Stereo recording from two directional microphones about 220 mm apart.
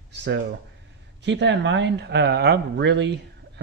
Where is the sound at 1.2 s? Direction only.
55° right (ahead or behind).